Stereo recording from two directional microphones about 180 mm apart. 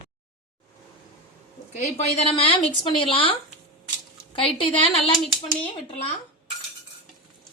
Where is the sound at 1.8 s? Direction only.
35° left (ahead or behind).